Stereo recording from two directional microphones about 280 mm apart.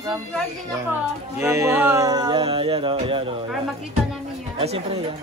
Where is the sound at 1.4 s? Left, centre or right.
Centre.